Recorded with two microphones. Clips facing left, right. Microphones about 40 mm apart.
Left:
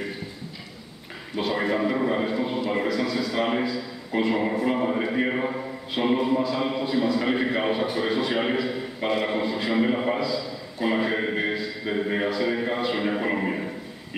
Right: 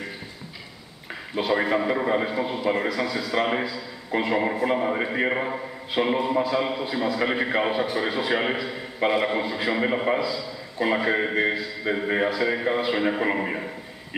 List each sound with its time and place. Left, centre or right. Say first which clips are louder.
1.4 s a man's voice: right 1 dB; centre